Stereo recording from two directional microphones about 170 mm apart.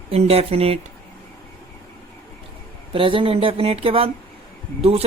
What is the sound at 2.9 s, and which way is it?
Speech, 30° right (ahead or behind).